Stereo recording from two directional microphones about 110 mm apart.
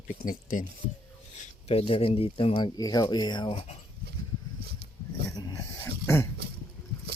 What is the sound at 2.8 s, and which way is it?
Speech, 35° left (ahead or behind).